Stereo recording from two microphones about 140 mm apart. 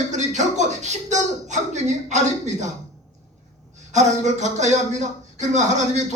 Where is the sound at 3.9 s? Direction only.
60° right (ahead or behind).